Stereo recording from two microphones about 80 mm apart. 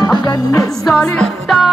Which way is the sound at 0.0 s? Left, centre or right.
Left.